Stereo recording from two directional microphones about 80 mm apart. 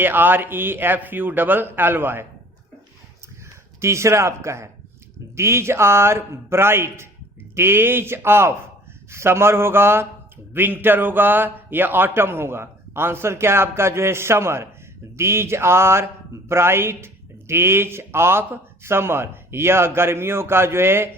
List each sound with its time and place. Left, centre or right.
0.0 s a man's voice: right
3.8 s a man's voice: right